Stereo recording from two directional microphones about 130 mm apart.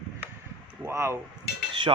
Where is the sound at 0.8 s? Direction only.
20° right (ahead or behind).